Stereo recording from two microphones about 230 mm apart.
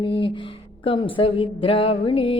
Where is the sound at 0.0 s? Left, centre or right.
Left.